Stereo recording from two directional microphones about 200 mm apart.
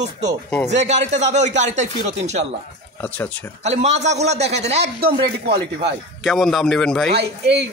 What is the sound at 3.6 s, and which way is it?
A man's voice, 35° right (ahead or behind).